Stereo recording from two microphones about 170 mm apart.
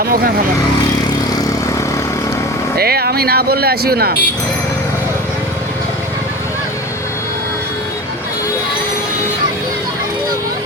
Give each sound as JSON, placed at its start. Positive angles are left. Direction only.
{"t": 2.7, "sound": "speech", "side_deg": -65}